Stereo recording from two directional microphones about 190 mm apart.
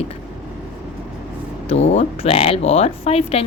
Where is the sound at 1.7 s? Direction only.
30° left (ahead or behind).